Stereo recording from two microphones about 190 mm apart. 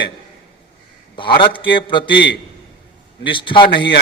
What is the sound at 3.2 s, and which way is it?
Speech, 25° left (ahead or behind).